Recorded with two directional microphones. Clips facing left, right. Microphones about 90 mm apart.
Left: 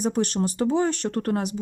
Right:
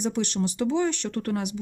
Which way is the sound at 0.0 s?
40° left (ahead or behind).